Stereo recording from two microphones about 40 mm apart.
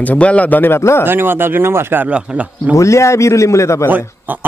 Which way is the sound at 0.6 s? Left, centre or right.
Left.